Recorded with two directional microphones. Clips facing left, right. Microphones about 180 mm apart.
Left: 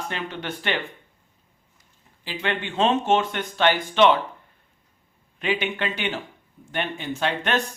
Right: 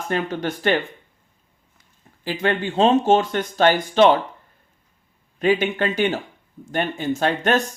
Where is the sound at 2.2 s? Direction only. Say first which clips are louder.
Right 6 dB; 45° right (ahead or behind).